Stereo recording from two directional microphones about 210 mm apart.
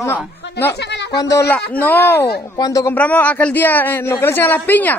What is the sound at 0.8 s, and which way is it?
Speech, 55° left (ahead or behind).